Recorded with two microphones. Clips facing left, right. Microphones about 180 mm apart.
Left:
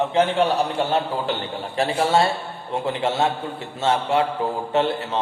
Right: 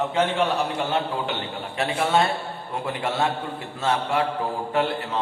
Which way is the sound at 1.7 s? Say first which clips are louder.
Left 3 dB; 35° left (ahead or behind).